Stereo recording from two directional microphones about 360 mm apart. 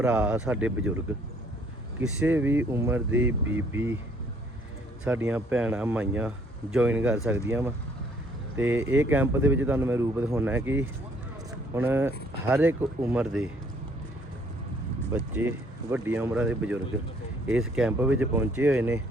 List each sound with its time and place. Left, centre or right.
0.0 s speech: centre
2.0 s speech: centre
5.0 s speech: centre
15.1 s speech: centre